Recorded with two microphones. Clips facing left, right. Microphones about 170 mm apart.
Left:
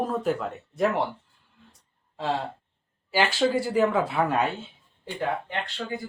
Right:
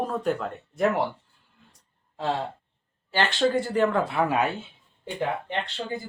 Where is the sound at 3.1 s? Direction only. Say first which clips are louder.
Even; 5° left (ahead or behind).